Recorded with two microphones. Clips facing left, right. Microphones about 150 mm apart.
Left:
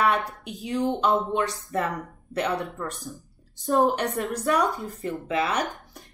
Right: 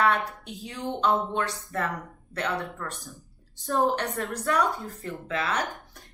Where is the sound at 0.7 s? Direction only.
15° left (ahead or behind).